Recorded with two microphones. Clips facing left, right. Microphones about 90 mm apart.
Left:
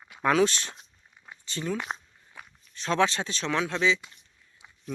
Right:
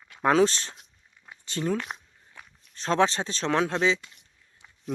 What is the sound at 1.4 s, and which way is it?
Speech, 45° right (ahead or behind).